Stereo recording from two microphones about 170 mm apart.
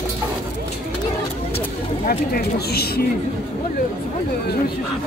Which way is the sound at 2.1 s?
65° left (ahead or behind).